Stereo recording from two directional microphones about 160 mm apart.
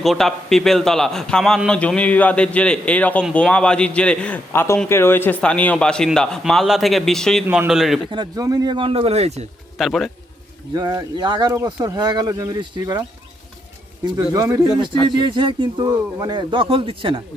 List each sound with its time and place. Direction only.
0.0 s a man's voice: centre (ahead or behind)
7.4 s a man's voice: 15° right (ahead or behind)
7.7 s a man's voice: centre (ahead or behind)
8.1 s a man's voice: 25° right (ahead or behind); by 9.5 s 40° right (ahead or behind)
9.7 s a man's voice: centre (ahead or behind)
10.8 s a man's voice: 25° right (ahead or behind)